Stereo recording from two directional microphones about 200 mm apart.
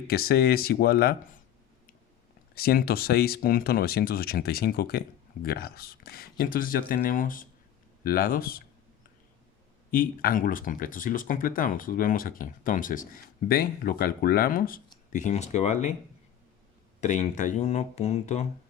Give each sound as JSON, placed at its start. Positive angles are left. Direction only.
{"t": 0.1, "sound": "speech", "side_deg": 50}
{"t": 2.6, "sound": "speech", "side_deg": 50}
{"t": 9.9, "sound": "speech", "side_deg": 45}
{"t": 17.0, "sound": "speech", "side_deg": 35}